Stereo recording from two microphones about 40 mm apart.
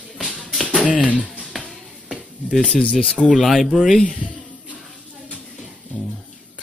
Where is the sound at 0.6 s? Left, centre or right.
Centre.